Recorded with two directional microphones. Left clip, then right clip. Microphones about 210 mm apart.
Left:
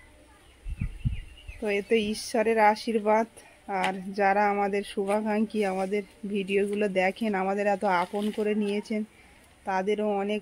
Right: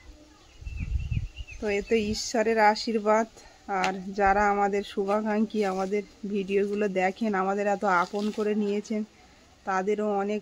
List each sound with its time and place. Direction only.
1.6 s speech: 5° left (ahead or behind)